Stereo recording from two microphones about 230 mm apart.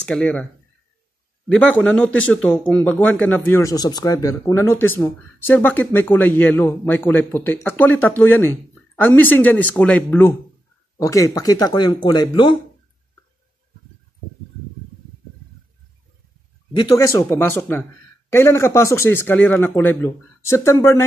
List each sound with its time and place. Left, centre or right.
0.0 s speech: centre
1.5 s speech: centre
16.7 s speech: centre